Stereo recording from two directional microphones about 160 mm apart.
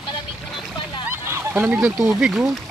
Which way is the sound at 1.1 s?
15° right (ahead or behind).